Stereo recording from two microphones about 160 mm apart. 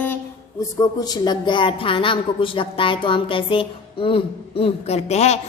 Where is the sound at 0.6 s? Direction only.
25° left (ahead or behind).